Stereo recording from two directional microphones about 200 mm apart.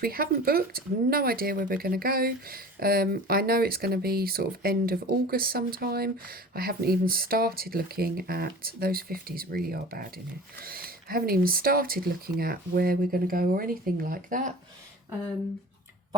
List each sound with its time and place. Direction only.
0.0 s speech: 45° right (ahead or behind)